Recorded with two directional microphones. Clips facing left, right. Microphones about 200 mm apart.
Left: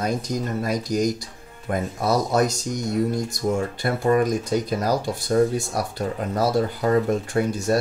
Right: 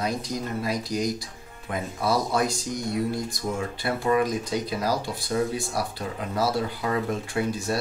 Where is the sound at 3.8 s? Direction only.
45° left (ahead or behind).